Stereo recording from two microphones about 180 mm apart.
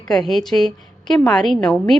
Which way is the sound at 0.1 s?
Centre (ahead or behind).